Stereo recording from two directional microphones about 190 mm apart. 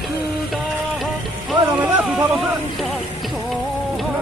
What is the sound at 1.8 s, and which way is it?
Speech, 5° right (ahead or behind).